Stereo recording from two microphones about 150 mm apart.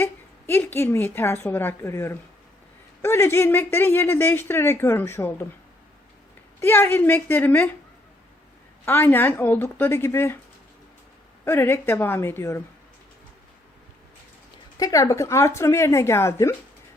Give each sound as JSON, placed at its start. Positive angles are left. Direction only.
{"t": 0.0, "sound": "a woman's voice", "side_deg": 15}
{"t": 6.6, "sound": "a woman's voice", "side_deg": 15}
{"t": 8.8, "sound": "a woman's voice", "side_deg": 15}
{"t": 11.4, "sound": "a woman's voice", "side_deg": 15}
{"t": 14.8, "sound": "a woman's voice", "side_deg": 25}